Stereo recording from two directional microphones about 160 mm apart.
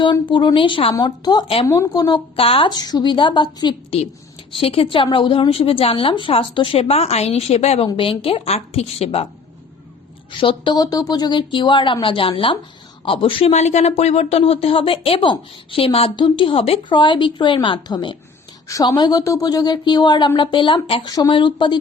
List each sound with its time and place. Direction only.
0.0 s speech: 30° left (ahead or behind)
1.6 s speech: 20° left (ahead or behind); by 9.2 s 40° left (ahead or behind)
10.4 s speech: 30° left (ahead or behind)